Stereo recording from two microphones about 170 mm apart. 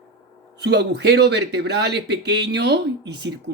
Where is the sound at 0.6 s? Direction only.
80° right.